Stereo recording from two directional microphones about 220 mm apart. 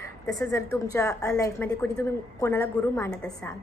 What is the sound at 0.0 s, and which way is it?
A woman's voice, 15° left (ahead or behind).